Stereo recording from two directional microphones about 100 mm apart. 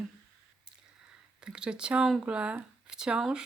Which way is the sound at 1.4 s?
10° right (ahead or behind).